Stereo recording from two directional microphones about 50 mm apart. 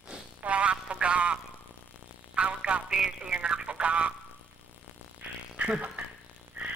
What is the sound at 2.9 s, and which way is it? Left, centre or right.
A man's voice, centre.